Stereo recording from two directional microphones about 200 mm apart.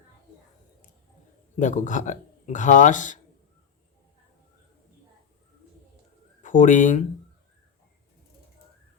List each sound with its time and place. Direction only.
1.5 s speech: 40° left (ahead or behind)
6.4 s speech: 40° left (ahead or behind)